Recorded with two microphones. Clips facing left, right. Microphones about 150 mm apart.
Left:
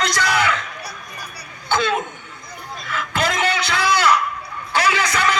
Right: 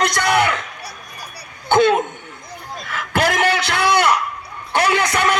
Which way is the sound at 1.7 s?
55° right (ahead or behind).